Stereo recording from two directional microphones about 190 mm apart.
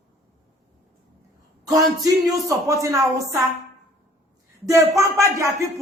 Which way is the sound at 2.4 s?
15° right (ahead or behind).